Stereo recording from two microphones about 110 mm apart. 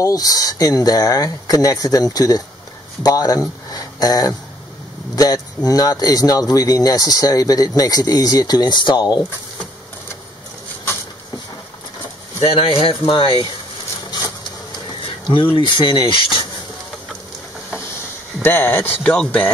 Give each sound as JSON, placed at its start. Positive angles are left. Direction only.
{"t": 0.0, "sound": "speech", "side_deg": 35}
{"t": 12.4, "sound": "speech", "side_deg": 60}
{"t": 15.5, "sound": "speech", "side_deg": 50}
{"t": 18.4, "sound": "speech", "side_deg": 20}